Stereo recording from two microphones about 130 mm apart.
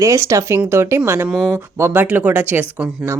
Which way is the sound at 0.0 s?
25° right (ahead or behind).